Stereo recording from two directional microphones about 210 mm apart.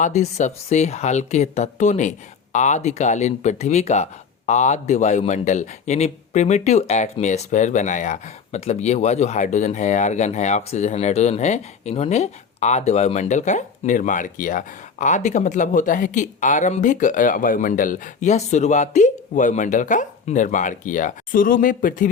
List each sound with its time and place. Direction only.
0.0 s speech: 35° left (ahead or behind)